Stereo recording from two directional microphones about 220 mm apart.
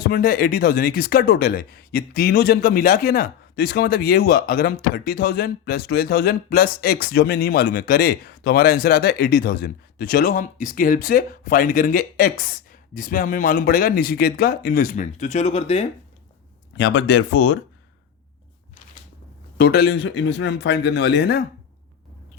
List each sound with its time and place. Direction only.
0.0 s speech: 40° left (ahead or behind)
16.7 s speech: 55° left (ahead or behind)
19.5 s speech: 45° left (ahead or behind)